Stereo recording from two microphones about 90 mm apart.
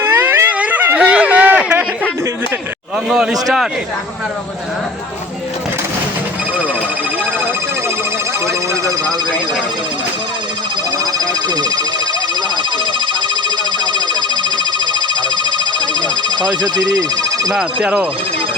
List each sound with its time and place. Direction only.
0.0 s a sound: 30° right (ahead or behind)
0.9 s a sound: 15° right (ahead or behind)
3.4 s speech: 5° right (ahead or behind)
13.9 s telephone: 60° right (ahead or behind)
16.6 s speech: 50° right (ahead or behind)
17.5 s speech: 10° right (ahead or behind)